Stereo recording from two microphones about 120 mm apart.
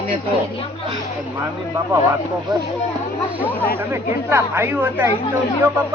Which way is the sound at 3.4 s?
15° left (ahead or behind).